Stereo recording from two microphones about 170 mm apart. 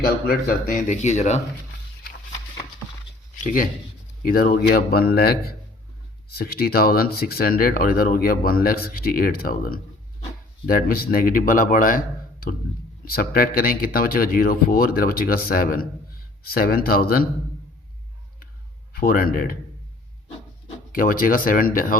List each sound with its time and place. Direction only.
0.3 s speech: 55° left (ahead or behind)
3.3 s speech: 50° left (ahead or behind)
18.9 s speech: 60° left (ahead or behind)
20.9 s speech: 55° left (ahead or behind)